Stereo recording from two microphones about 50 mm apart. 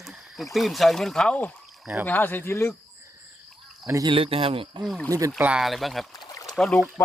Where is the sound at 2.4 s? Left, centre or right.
Left.